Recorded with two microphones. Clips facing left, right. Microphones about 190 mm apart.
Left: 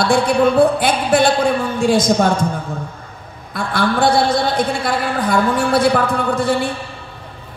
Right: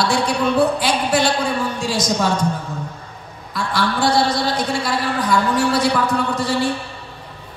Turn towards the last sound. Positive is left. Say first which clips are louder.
# left 3 dB
turn(degrees=55)  # may be behind; listen again after turning